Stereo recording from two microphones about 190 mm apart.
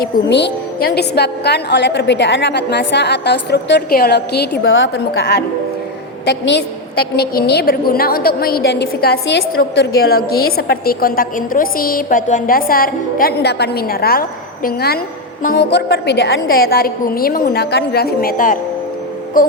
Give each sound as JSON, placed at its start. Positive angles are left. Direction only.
{"t": 0.3, "sound": "a woman's voice", "side_deg": 65}